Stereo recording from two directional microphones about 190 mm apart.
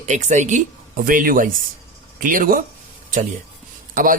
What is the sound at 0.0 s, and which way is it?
A man's voice, 40° right (ahead or behind).